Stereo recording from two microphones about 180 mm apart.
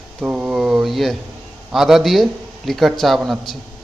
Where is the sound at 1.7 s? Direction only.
Centre (ahead or behind).